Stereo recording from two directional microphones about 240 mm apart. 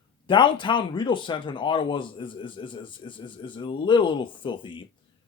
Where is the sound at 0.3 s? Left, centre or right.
Centre.